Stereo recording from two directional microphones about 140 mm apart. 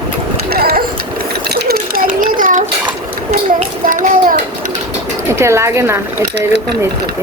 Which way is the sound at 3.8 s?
75° right (ahead or behind).